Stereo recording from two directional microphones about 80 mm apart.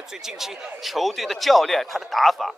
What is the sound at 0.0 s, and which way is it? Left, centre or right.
A man's voice, centre.